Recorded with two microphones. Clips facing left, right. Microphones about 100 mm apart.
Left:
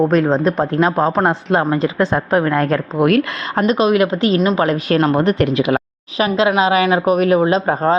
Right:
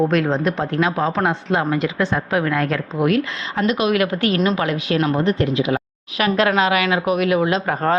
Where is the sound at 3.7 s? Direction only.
30° left (ahead or behind).